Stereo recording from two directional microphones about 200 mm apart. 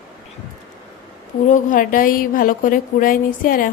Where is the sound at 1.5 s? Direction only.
40° left (ahead or behind).